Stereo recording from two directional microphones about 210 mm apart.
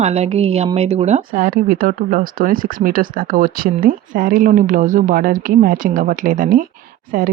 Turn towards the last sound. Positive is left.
turn(degrees=-40)  # may be behind; listen again after turning